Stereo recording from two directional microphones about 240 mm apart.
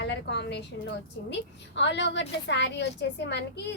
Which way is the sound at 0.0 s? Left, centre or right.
Left.